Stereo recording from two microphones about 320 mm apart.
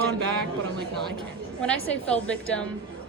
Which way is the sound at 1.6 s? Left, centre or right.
Centre.